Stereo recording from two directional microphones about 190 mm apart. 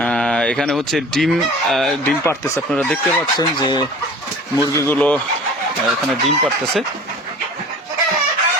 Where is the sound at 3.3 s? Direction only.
25° left (ahead or behind); by 5.2 s 10° left (ahead or behind).